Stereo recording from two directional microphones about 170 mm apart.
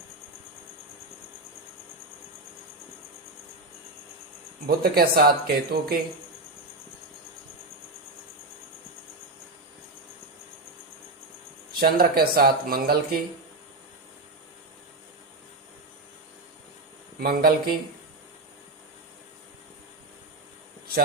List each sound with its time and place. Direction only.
4.6 s speech: 60° right (ahead or behind)
11.7 s speech: 60° right (ahead or behind)
17.2 s speech: 60° right (ahead or behind)